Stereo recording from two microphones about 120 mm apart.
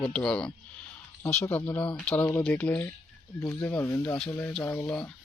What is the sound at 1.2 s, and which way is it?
Speech, 20° left (ahead or behind).